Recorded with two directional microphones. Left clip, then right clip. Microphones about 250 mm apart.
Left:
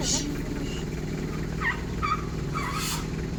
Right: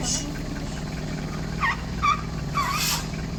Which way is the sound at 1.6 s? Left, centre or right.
Centre.